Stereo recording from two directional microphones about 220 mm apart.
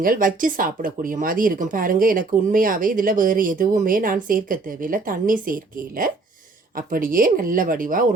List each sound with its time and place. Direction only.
0.0 s speech: 40° right (ahead or behind)